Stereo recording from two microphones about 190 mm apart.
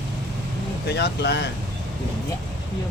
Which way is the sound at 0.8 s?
60° left (ahead or behind).